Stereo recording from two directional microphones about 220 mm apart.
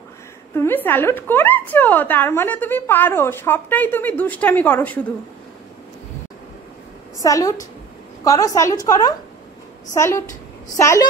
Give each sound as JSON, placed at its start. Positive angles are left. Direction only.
{"t": 0.6, "sound": "a woman's voice", "side_deg": 10}
{"t": 7.2, "sound": "a woman's voice", "side_deg": 15}